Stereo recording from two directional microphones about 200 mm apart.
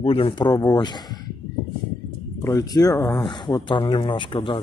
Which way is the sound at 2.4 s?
15° left (ahead or behind).